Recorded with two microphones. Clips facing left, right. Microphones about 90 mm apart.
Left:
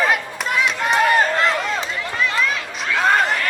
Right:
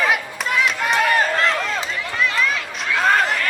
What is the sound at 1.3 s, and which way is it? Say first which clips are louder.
Run: left 1 dB; centre (ahead or behind).